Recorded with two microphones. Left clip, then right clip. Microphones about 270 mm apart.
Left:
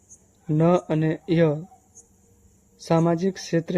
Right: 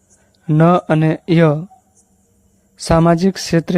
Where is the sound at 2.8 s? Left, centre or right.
Right.